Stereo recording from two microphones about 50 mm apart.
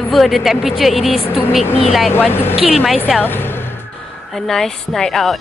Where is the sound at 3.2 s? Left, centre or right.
Left.